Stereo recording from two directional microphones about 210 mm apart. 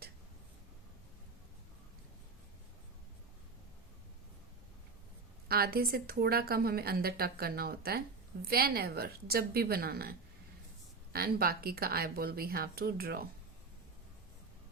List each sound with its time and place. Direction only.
5.5 s speech: 45° right (ahead or behind)